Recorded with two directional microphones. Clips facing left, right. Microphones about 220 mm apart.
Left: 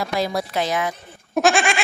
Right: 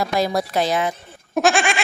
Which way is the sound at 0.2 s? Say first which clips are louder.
Right 2 dB; 40° right (ahead or behind).